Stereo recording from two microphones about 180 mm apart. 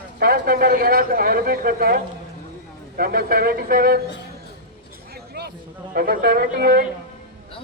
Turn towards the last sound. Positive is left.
turn(degrees=-60)  # may be behind; listen again after turning